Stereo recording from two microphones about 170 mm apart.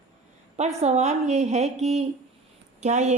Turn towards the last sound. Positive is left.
turn(degrees=-40)  # may be behind; listen again after turning